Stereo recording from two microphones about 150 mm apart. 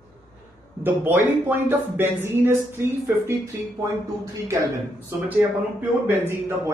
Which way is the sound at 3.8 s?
20° right (ahead or behind).